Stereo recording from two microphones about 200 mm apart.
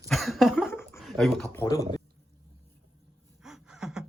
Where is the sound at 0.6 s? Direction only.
10° left (ahead or behind).